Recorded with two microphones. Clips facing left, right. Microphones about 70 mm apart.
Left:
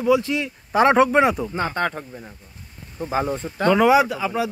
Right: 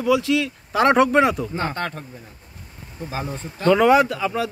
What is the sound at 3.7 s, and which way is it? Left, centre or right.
Speech, centre.